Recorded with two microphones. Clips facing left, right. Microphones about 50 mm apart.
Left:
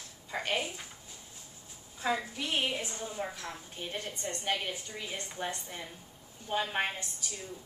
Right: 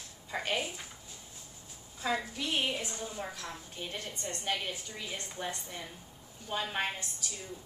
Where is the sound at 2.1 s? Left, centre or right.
Centre.